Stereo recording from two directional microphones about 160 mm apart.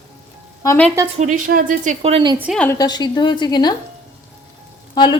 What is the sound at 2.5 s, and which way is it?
Speech, 15° left (ahead or behind).